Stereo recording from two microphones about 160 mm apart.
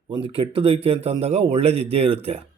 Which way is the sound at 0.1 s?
35° right (ahead or behind).